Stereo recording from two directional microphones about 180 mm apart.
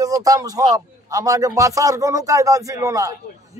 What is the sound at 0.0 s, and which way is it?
Speech, 20° right (ahead or behind).